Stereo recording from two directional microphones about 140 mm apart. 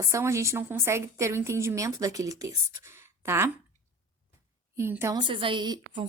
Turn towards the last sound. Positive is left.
turn(degrees=-35)  # may be behind; listen again after turning